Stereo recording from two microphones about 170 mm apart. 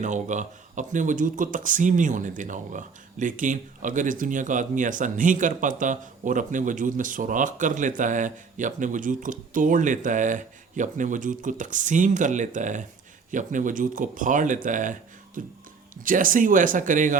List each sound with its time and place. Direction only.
0.0 s speech: 45° right (ahead or behind)